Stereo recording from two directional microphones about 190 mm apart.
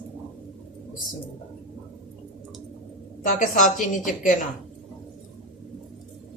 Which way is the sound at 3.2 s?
40° left (ahead or behind).